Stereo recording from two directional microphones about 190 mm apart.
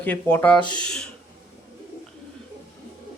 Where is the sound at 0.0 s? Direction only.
10° left (ahead or behind).